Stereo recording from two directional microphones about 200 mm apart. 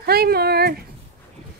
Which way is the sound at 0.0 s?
50° right (ahead or behind).